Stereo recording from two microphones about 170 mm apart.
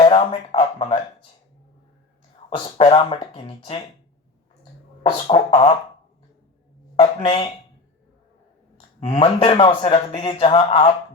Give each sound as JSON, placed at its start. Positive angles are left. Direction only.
{"t": 0.0, "sound": "a sound", "side_deg": 30}
{"t": 2.5, "sound": "speech", "side_deg": 35}
{"t": 5.3, "sound": "speech", "side_deg": 30}
{"t": 7.0, "sound": "speech", "side_deg": 30}
{"t": 9.0, "sound": "speech", "side_deg": 30}